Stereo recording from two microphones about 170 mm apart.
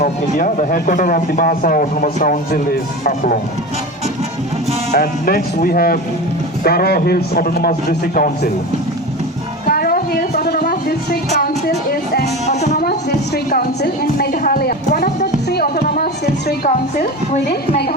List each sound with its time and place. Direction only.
0.0 s a man's voice: 55° left (ahead or behind)
4.9 s a man's voice: 60° left (ahead or behind)
9.6 s a sound: 60° left (ahead or behind)
12.5 s music: 40° left (ahead or behind)
12.8 s a sound: 60° left (ahead or behind)
16.5 s a man's voice: 65° left (ahead or behind)